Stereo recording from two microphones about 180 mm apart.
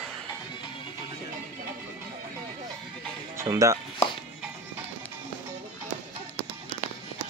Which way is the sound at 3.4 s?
15° right (ahead or behind).